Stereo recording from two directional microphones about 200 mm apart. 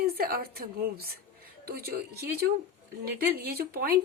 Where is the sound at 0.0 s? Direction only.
50° right (ahead or behind).